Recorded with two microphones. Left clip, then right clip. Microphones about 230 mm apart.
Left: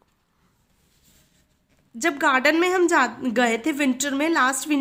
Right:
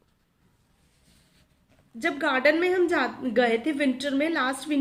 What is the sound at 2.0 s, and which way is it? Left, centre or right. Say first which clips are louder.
A woman's voice: left 3 dB; left.